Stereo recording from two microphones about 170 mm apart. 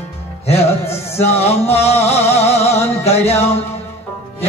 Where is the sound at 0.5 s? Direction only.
35° left (ahead or behind).